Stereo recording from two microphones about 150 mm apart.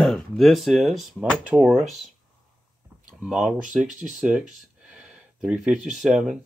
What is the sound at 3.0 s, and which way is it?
Speech, 5° right (ahead or behind).